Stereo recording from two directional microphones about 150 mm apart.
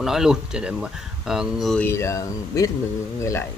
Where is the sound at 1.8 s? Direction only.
20° left (ahead or behind).